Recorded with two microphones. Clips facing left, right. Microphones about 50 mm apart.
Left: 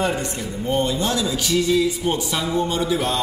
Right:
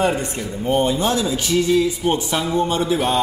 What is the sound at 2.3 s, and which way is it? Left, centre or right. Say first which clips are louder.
Speech: right 2 dB; centre.